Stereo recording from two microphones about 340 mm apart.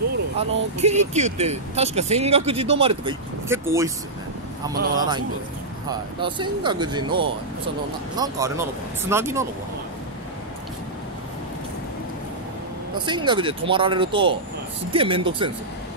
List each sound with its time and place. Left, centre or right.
0.4 s speech: centre
4.7 s speech: right
5.9 s speech: centre
12.9 s speech: centre